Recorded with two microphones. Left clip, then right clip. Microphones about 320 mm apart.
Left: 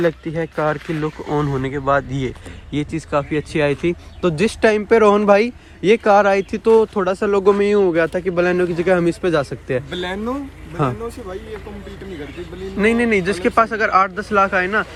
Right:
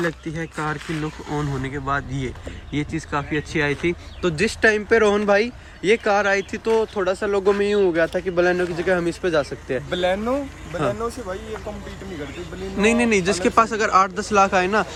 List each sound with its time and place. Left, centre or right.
0.0 s a man's voice: centre
9.9 s speech: centre
12.7 s speech: centre